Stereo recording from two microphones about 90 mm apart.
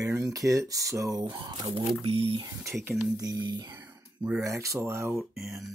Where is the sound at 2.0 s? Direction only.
90° right.